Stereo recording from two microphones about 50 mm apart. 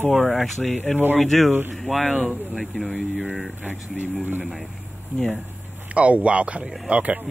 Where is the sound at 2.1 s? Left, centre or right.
Centre.